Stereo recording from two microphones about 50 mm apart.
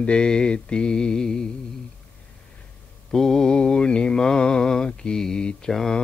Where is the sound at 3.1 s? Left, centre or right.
Centre.